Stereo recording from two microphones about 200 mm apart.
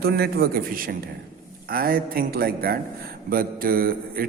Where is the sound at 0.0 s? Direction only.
50° right (ahead or behind).